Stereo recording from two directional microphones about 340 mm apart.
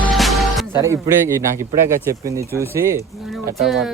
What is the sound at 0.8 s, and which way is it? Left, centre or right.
Speech, centre.